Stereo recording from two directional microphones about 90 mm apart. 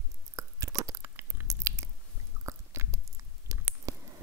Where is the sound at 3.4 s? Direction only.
30° right (ahead or behind).